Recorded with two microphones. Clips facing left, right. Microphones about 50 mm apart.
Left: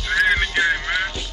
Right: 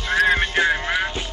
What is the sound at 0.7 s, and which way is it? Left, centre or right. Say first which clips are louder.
Music: even; centre.